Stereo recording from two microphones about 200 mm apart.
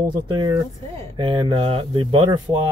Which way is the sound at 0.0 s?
20° right (ahead or behind).